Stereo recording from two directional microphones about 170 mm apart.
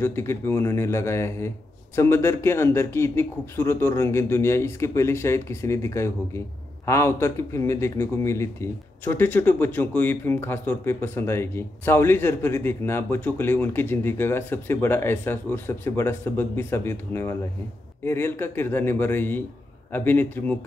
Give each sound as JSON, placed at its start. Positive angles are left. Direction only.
{"t": 0.0, "sound": "a man's voice", "side_deg": 15}